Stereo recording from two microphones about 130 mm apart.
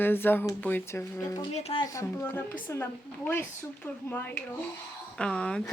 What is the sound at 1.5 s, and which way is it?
Speech, 50° left (ahead or behind).